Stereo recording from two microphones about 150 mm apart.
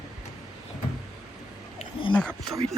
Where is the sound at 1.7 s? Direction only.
35° left (ahead or behind).